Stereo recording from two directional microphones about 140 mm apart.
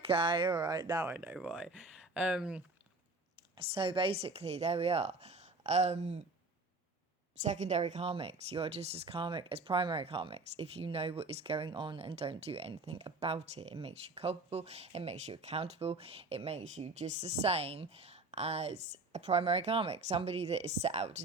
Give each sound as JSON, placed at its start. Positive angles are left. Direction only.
{"t": 0.0, "sound": "speech", "side_deg": -40}
{"t": 1.1, "sound": "speech", "side_deg": -10}
{"t": 3.6, "sound": "speech", "side_deg": -40}
{"t": 7.4, "sound": "speech", "side_deg": -55}